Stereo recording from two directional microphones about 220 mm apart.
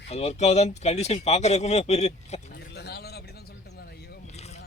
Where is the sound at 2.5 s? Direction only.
50° left (ahead or behind).